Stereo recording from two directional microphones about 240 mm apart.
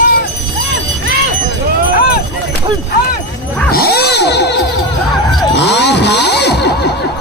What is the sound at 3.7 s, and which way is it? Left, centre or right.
Music, left.